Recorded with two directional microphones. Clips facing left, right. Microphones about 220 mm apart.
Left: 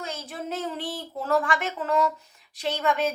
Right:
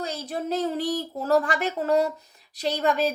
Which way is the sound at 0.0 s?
35° right (ahead or behind).